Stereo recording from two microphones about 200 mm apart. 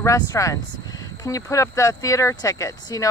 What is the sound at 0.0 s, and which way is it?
Speech, 15° left (ahead or behind).